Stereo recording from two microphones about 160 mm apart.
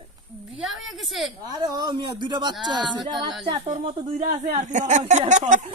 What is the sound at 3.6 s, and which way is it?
Speech, 40° right (ahead or behind).